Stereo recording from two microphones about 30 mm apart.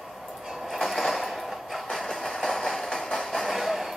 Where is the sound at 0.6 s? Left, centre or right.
Centre.